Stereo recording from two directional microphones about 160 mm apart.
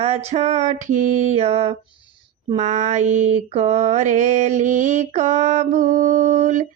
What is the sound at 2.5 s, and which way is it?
Mantra, 50° right (ahead or behind).